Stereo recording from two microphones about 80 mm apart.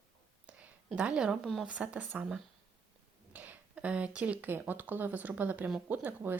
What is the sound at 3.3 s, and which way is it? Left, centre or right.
Speech, right.